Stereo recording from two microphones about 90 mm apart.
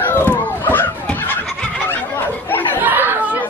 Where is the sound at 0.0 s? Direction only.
20° left (ahead or behind).